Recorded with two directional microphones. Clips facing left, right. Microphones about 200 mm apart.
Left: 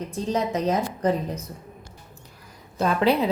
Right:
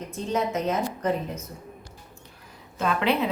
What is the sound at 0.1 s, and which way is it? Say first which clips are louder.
Speech: left 1 dB; 35° left (ahead or behind).